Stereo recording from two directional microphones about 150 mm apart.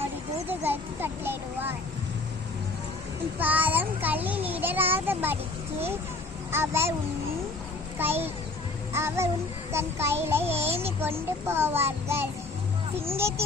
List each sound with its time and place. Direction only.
0.4 s a sound: 15° right (ahead or behind)
3.3 s a child's voice: 10° right (ahead or behind)
6.5 s a child's voice: 15° right (ahead or behind)
7.9 s a child's voice: 15° right (ahead or behind)